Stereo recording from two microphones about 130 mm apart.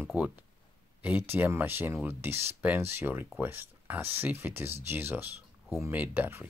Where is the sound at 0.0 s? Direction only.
10° right (ahead or behind).